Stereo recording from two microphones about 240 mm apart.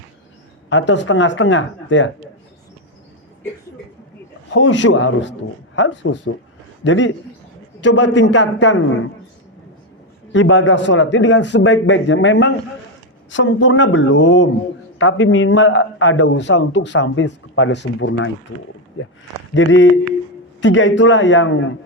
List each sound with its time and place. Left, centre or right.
0.7 s a man's voice: left
4.5 s a man's voice: left
10.3 s a man's voice: left